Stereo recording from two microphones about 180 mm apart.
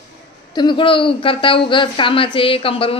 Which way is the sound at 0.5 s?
25° left (ahead or behind).